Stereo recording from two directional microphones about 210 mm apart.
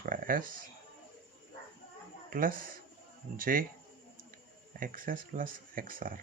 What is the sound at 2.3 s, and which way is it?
Speech, 40° right (ahead or behind).